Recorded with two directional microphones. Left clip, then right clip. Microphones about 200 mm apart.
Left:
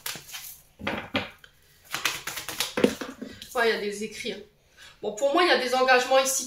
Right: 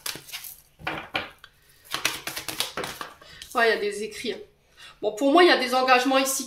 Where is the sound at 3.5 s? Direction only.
50° right (ahead or behind).